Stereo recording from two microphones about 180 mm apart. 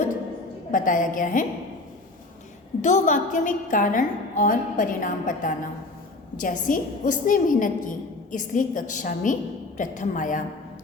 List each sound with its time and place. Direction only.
0.7 s a woman's voice: 45° left (ahead or behind)
2.8 s a woman's voice: 45° left (ahead or behind)